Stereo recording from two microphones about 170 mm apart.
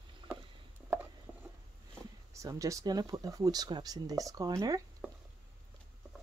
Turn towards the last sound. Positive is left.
turn(degrees=-20)  # may be behind; listen again after turning